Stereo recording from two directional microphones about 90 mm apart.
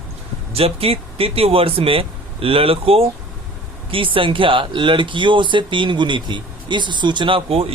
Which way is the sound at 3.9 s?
75° right (ahead or behind).